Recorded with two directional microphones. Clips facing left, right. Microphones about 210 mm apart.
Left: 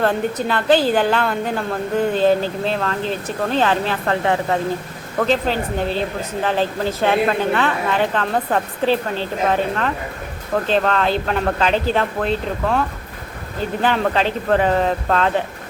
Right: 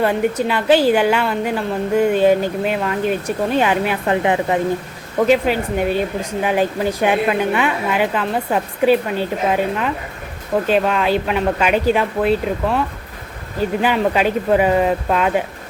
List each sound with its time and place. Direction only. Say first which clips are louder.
0.0 s a woman's voice: right 2 dB; 10° right (ahead or behind)
13.8 s a woman's voice: right 1 dB; 10° right (ahead or behind)